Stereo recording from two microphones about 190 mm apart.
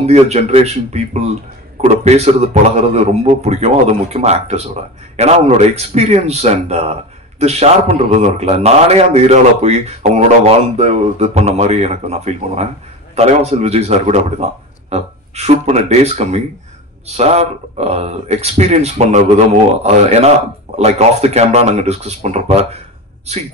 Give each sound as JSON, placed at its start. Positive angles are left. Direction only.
{"t": 0.0, "sound": "a man's voice", "side_deg": -35}